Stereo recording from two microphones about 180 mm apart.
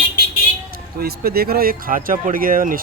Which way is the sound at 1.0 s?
60° right (ahead or behind).